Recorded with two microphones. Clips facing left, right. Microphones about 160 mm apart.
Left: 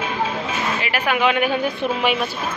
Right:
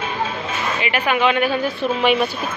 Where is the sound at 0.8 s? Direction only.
5° left (ahead or behind).